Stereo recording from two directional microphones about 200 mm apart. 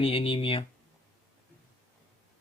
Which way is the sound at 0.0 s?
25° left (ahead or behind).